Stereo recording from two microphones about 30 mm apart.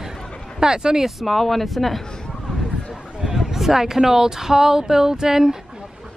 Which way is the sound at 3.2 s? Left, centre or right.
Centre.